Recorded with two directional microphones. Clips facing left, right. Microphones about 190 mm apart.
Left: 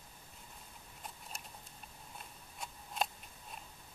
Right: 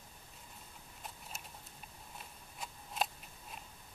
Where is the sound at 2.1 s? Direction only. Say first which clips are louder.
Even; centre (ahead or behind).